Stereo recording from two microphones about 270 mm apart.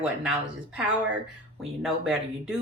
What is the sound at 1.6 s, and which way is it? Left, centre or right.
Speech, centre.